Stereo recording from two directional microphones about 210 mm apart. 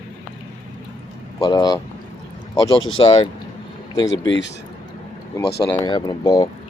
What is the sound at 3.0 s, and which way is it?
Speech, 20° left (ahead or behind).